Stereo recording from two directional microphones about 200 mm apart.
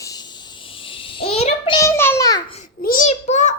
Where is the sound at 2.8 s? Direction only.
40° left (ahead or behind).